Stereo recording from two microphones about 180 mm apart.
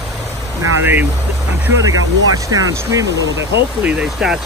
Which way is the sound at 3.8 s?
5° right (ahead or behind).